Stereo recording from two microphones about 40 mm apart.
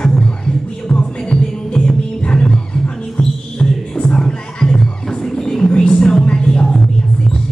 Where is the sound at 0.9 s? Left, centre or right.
Left.